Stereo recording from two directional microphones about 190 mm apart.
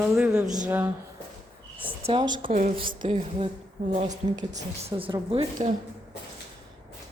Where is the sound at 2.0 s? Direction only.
25° right (ahead or behind).